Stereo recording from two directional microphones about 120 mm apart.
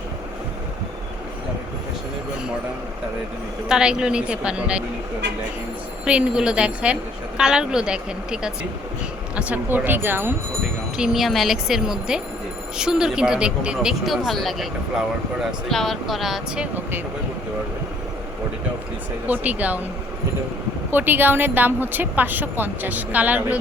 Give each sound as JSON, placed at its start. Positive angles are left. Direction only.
{"t": 3.7, "sound": "a woman's voice", "side_deg": -5}
{"t": 6.1, "sound": "a woman's voice", "side_deg": -10}
{"t": 10.9, "sound": "speech", "side_deg": -5}
{"t": 15.7, "sound": "speech", "side_deg": 0}
{"t": 19.3, "sound": "a woman's voice", "side_deg": -10}
{"t": 20.9, "sound": "a woman's voice", "side_deg": -15}